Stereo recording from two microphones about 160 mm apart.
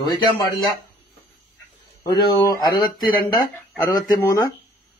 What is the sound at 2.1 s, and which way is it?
Speech, 25° left (ahead or behind).